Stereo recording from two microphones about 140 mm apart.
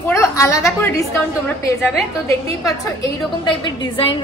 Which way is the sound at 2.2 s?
25° left (ahead or behind).